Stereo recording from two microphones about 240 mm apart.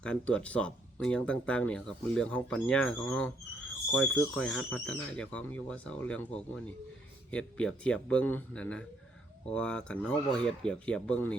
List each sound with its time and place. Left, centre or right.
0.0 s speech: centre